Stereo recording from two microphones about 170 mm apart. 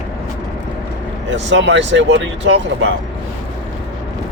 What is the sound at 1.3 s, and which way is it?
Speech, 90° right.